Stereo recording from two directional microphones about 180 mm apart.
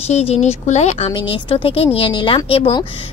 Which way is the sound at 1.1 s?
25° left (ahead or behind).